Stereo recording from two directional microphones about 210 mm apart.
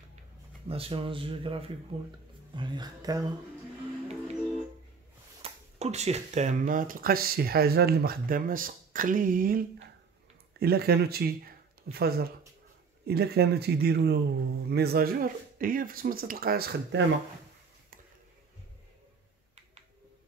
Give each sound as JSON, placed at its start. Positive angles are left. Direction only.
{"t": 0.7, "sound": "speech", "side_deg": -25}
{"t": 5.4, "sound": "speech", "side_deg": -30}